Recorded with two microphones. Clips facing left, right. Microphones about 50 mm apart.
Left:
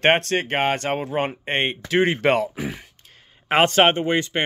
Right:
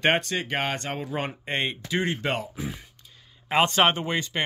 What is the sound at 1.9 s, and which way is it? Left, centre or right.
Speech, left.